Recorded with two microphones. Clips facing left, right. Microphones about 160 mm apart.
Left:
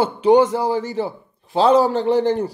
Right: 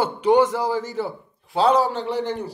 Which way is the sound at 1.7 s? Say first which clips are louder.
Left 7 dB; 40° left (ahead or behind).